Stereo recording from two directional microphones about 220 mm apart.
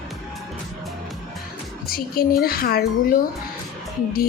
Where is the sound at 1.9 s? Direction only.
40° left (ahead or behind).